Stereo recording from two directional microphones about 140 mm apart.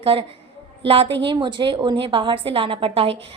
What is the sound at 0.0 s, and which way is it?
A woman's voice, 40° right (ahead or behind).